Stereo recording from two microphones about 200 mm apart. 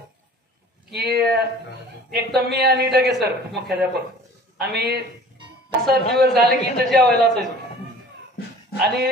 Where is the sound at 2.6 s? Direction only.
50° right (ahead or behind).